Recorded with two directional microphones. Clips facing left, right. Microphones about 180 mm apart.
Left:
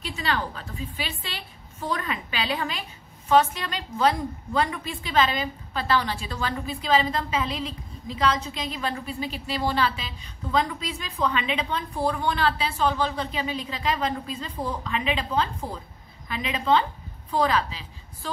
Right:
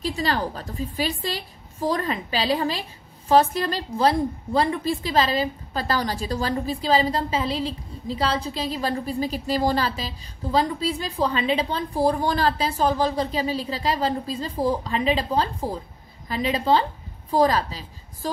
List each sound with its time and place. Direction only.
0.0 s a woman's voice: 35° right (ahead or behind)